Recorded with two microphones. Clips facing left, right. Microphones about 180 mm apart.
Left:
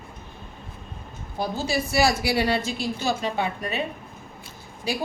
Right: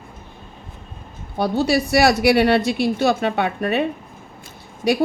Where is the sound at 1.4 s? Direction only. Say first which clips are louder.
Right 8 dB; 70° right (ahead or behind).